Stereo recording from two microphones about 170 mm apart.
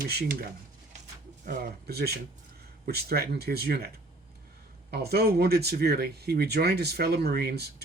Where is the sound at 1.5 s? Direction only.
65° right (ahead or behind).